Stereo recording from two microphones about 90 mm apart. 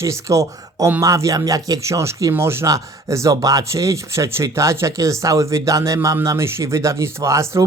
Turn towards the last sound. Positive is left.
turn(degrees=-35)  # may be behind; listen again after turning